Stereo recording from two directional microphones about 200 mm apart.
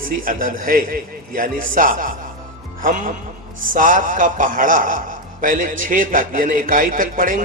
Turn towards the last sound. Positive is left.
turn(degrees=-45)  # may be behind; listen again after turning